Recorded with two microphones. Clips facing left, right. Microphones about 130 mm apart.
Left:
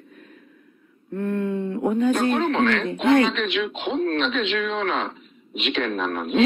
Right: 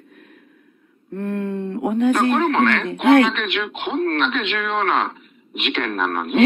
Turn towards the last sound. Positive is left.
turn(degrees=-60)  # may be behind; listen again after turning